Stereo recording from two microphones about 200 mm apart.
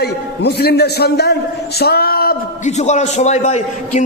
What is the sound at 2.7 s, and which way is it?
A man's voice, 35° left (ahead or behind).